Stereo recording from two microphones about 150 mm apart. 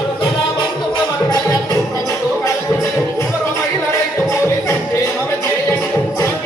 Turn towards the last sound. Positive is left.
turn(degrees=20)  # may be behind; listen again after turning